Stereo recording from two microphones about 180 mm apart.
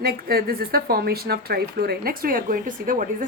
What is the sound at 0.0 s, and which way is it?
A woman's voice, 55° right (ahead or behind).